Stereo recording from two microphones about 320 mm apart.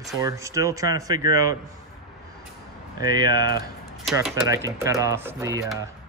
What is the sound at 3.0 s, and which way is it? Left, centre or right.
Speech, centre.